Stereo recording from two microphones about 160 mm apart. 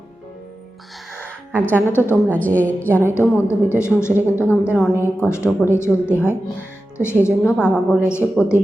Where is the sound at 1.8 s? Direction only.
15° left (ahead or behind).